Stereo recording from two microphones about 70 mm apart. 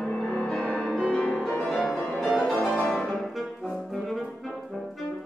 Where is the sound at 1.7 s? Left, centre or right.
Centre.